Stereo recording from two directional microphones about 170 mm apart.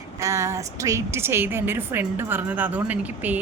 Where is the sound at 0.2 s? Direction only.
15° right (ahead or behind).